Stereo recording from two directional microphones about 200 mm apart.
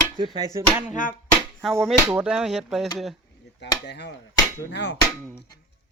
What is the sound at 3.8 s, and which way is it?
Speech, 55° left (ahead or behind).